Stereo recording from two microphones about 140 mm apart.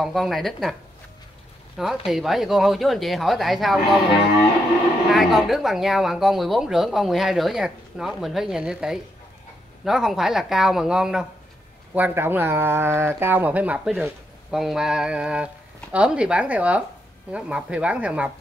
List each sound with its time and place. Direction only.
0.0 s speech: centre (ahead or behind)
1.8 s speech: centre (ahead or behind)
5.1 s speech: centre (ahead or behind)